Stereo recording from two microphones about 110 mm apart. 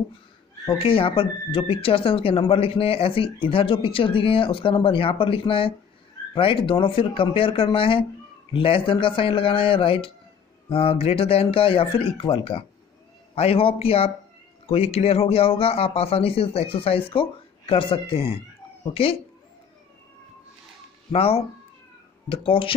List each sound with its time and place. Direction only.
0.7 s a man's voice: 55° left (ahead or behind)
21.1 s a man's voice: 65° left (ahead or behind)
22.3 s speech: 55° left (ahead or behind)